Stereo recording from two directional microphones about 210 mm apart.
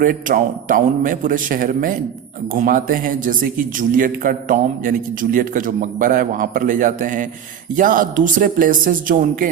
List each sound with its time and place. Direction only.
0.0 s a man's voice: 40° right (ahead or behind)